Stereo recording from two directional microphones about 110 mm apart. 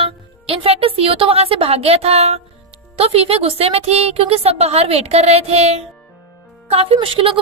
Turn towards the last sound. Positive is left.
turn(degrees=-55)  # may be behind; listen again after turning